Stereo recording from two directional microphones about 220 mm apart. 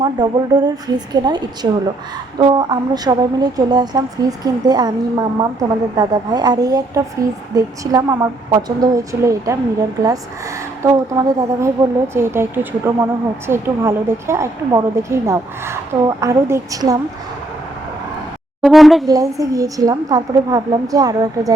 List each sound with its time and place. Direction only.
0.0 s a woman's voice: 20° right (ahead or behind)
10.8 s a woman's voice: 15° right (ahead or behind)
18.6 s speech: centre (ahead or behind)
19.0 s a woman's voice: 15° right (ahead or behind)